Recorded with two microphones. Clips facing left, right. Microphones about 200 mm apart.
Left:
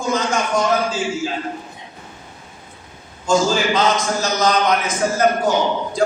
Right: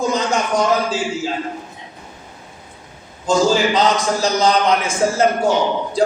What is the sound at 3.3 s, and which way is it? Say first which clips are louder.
A man's voice: right 2 dB; 35° right (ahead or behind).